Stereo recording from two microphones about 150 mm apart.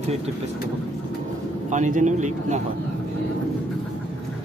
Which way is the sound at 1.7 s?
55° right (ahead or behind).